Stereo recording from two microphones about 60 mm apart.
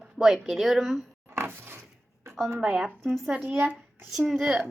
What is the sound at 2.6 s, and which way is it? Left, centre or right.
Speech, centre.